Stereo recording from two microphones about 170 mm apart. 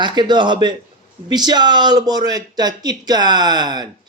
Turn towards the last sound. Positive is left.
turn(degrees=-25)  # may be behind; listen again after turning